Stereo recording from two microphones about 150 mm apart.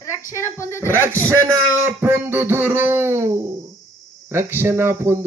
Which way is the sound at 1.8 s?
15° right (ahead or behind).